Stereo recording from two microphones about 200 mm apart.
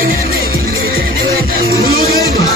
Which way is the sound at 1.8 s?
50° right (ahead or behind).